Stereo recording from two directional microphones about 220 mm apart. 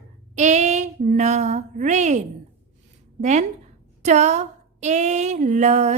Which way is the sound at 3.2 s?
35° right (ahead or behind).